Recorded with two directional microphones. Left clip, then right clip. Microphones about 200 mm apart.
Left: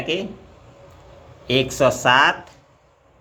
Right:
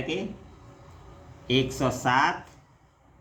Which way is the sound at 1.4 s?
35° left (ahead or behind).